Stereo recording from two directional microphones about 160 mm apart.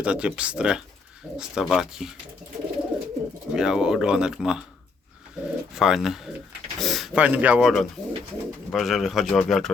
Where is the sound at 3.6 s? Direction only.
5° right (ahead or behind).